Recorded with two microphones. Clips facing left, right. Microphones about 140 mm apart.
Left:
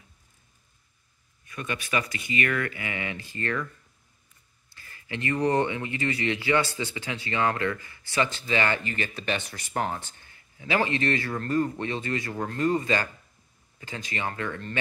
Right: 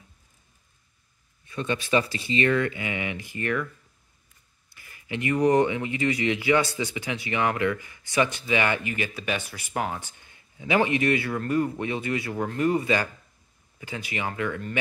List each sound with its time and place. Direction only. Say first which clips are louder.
1.4 s speech: right 5 dB; 25° right (ahead or behind)
4.6 s speech: right 3 dB; 15° right (ahead or behind)